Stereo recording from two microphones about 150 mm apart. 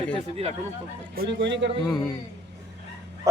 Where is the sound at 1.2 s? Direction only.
80° right.